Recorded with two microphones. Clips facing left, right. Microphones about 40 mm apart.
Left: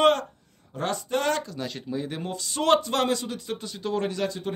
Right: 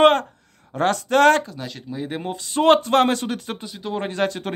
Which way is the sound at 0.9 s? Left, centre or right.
Right.